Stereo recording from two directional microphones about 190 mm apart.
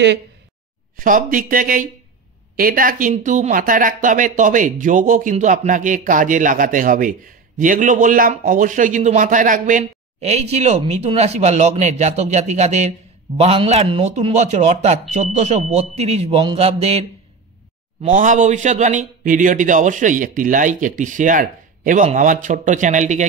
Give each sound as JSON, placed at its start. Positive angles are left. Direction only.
{"t": 0.9, "sound": "speech", "side_deg": -45}
{"t": 18.0, "sound": "speech", "side_deg": -40}